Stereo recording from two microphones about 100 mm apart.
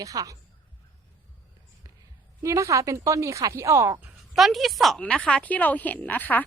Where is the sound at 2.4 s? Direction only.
30° right (ahead or behind).